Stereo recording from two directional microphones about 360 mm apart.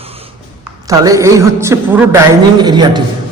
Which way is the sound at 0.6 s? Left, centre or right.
Centre.